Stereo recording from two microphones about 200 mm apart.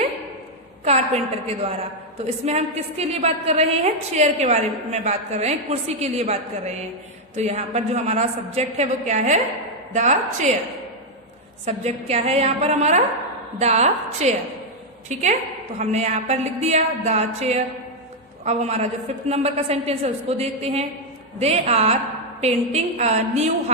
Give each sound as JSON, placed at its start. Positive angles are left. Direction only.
{"t": 0.9, "sound": "a woman's voice", "side_deg": -30}
{"t": 11.6, "sound": "a woman's voice", "side_deg": -35}